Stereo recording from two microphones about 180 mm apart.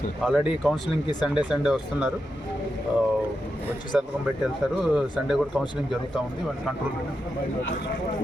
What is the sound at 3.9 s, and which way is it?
Speech, 5° right (ahead or behind).